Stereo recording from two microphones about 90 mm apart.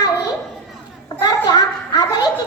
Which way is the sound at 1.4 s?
50° left (ahead or behind).